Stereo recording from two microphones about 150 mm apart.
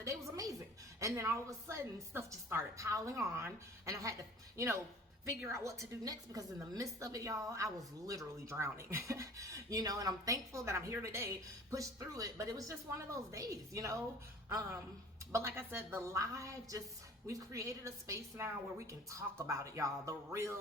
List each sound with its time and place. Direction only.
0.0 s a sound: 20° right (ahead or behind)
0.9 s a woman's voice: 20° right (ahead or behind)
15.3 s a woman's voice: 20° right (ahead or behind)